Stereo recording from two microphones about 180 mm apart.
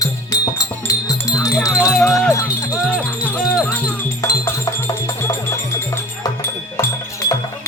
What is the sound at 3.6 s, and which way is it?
Music, 15° left (ahead or behind).